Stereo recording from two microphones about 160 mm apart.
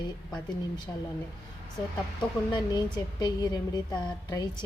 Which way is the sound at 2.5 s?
25° left (ahead or behind).